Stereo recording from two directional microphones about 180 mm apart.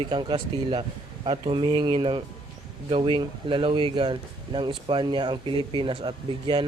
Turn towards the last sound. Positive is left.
turn(degrees=-25)  # may be behind; listen again after turning